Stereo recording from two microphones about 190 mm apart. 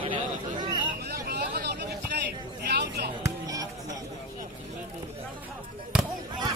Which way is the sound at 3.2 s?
20° right (ahead or behind).